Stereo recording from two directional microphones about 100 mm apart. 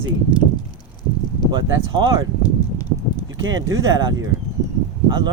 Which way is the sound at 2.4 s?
45° left (ahead or behind).